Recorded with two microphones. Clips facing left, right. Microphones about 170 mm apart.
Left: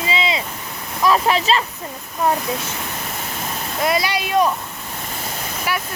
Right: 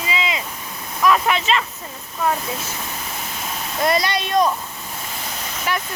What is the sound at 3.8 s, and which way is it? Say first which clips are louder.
Speech: even; 5° left (ahead or behind).